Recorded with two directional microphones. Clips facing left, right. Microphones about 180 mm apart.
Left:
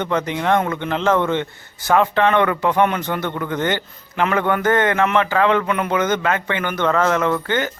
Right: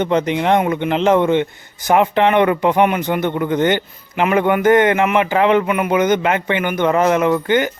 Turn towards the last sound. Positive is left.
turn(degrees=-15)  # may be behind; listen again after turning